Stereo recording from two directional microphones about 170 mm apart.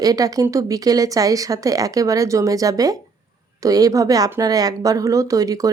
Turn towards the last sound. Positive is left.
turn(degrees=-20)  # may be behind; listen again after turning